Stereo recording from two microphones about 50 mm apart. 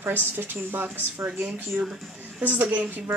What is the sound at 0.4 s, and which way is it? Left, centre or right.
Speech, right.